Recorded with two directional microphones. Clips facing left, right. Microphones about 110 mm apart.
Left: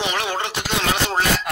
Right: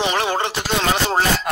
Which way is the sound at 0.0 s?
35° right (ahead or behind).